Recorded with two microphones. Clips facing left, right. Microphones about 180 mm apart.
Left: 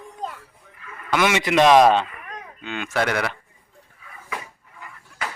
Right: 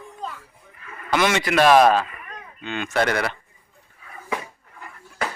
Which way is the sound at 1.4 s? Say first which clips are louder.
Left 1 dB; 20° left (ahead or behind).